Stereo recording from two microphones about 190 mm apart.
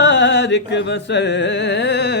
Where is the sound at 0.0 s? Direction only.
70° left (ahead or behind).